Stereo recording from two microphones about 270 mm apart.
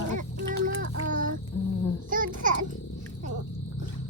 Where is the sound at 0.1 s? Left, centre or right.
Right.